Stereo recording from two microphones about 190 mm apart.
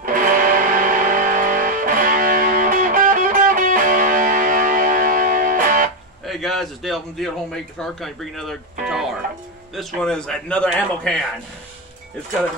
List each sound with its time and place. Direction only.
0.0 s music: 45° right (ahead or behind)
6.2 s a man's voice: centre (ahead or behind)